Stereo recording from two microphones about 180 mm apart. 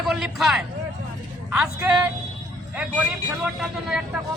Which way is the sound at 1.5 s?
5° right (ahead or behind).